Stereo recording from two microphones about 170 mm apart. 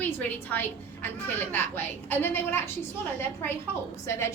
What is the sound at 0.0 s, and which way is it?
A woman's voice, 10° left (ahead or behind).